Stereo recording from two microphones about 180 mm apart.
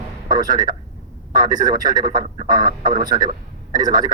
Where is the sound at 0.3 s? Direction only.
20° right (ahead or behind).